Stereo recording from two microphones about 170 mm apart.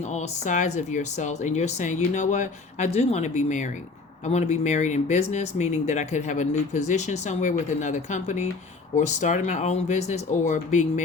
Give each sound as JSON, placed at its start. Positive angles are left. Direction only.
{"t": 0.1, "sound": "speech", "side_deg": 45}